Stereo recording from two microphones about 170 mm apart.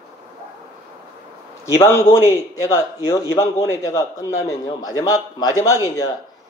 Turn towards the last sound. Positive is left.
turn(degrees=20)  # may be behind; listen again after turning